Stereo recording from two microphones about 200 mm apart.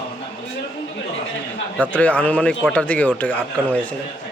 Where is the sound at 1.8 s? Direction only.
5° left (ahead or behind).